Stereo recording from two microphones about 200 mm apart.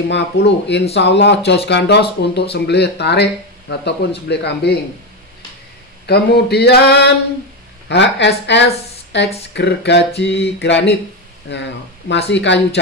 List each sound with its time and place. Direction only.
0.1 s speech: 60° left (ahead or behind)
6.0 s a woman's voice: 55° left (ahead or behind)